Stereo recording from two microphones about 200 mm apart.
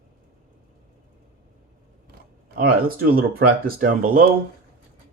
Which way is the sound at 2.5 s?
50° right (ahead or behind).